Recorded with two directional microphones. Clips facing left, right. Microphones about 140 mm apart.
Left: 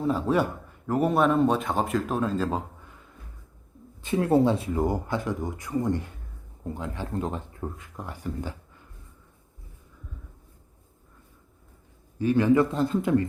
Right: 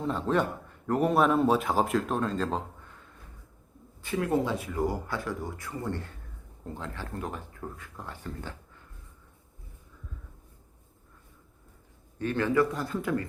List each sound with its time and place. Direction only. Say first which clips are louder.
0.0 s speech: left 3 dB; 5° left (ahead or behind)
4.0 s speech: left 6 dB; 25° left (ahead or behind)
12.2 s speech: left 6 dB; 10° left (ahead or behind)
12.5 s speech: left 4 dB; 25° left (ahead or behind)